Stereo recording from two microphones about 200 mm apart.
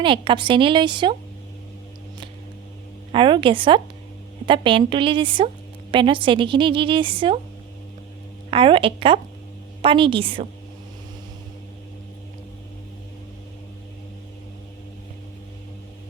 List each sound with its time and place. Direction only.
0.0 s a woman's voice: 25° right (ahead or behind)
3.1 s a woman's voice: 25° right (ahead or behind)
8.4 s a woman's voice: 25° right (ahead or behind)